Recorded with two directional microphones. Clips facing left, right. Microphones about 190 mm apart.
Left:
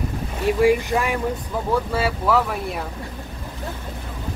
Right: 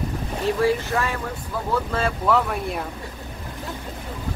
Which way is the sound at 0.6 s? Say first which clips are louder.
Left 5 dB; 15° left (ahead or behind).